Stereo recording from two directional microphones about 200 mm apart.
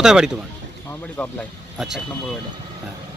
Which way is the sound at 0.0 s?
5° right (ahead or behind).